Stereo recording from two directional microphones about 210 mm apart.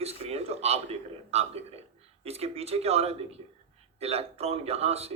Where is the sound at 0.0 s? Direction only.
30° right (ahead or behind).